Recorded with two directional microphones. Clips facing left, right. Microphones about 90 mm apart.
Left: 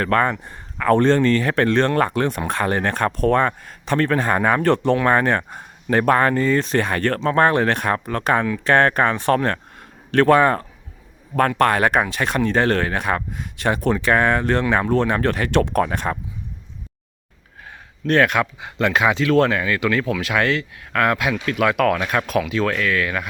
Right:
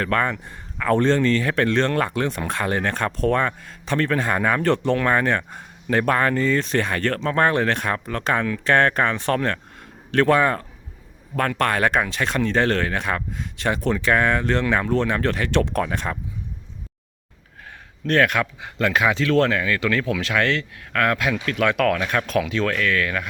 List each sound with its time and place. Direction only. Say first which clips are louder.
0.0 s speech: left 3 dB; 40° left (ahead or behind)
10.1 s speech: left 3 dB; 45° left (ahead or behind)
18.0 s speech: left 2 dB; 20° left (ahead or behind)